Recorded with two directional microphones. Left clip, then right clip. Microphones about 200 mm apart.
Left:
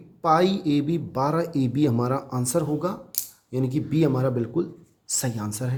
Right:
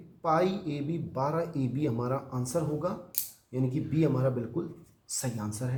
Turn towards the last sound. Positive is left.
turn(degrees=45)  # may be behind; listen again after turning